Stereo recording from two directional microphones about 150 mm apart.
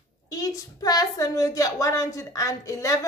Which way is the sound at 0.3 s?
25° left (ahead or behind).